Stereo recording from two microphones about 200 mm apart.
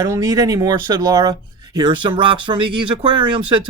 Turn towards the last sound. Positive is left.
turn(degrees=-25)  # may be behind; listen again after turning